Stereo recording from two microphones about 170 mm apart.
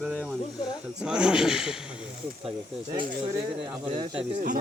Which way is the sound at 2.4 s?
35° right (ahead or behind).